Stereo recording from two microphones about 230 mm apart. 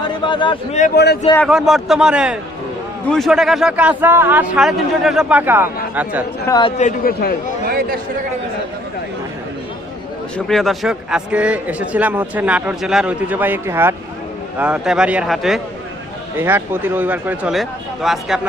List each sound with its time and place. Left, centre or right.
0.3 s a man's voice: left
0.9 s a man's voice: left
1.4 s speech: centre
6.5 s speech: left
7.6 s a sound: right
10.3 s speech: centre